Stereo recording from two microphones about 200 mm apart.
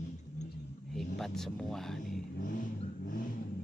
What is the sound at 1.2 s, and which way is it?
A man's voice, centre (ahead or behind).